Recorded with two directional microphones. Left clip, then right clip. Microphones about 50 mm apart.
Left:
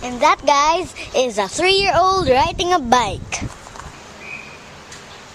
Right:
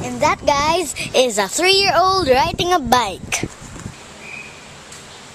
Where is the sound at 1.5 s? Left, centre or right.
Centre.